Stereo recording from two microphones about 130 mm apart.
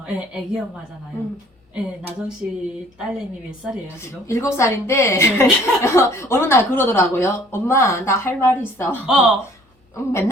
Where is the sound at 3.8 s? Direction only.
20° left (ahead or behind).